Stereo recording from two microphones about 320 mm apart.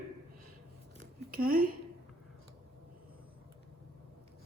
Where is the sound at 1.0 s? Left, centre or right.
Right.